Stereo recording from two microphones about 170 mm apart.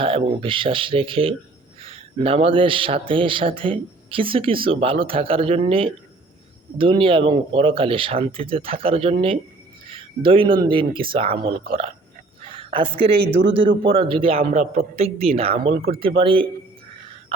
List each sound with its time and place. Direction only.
0.0 s a man's voice: 30° right (ahead or behind)
9.8 s a sound: 30° right (ahead or behind)
10.6 s a man's voice: 30° right (ahead or behind)